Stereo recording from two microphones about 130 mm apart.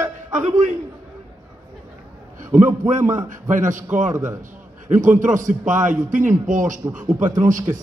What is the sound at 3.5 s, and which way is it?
Speech, 80° right.